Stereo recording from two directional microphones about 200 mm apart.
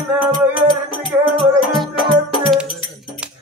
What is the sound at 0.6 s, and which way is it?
Music, 25° left (ahead or behind).